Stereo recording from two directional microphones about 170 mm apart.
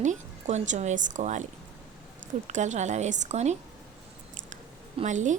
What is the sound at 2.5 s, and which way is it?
A woman's voice, 45° right (ahead or behind).